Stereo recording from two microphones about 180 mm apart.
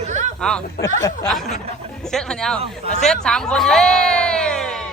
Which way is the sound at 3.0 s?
5° left (ahead or behind).